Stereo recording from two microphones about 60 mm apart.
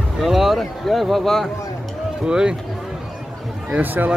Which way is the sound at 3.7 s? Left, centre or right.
Right.